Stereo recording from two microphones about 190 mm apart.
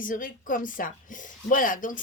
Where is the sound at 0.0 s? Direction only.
45° left (ahead or behind).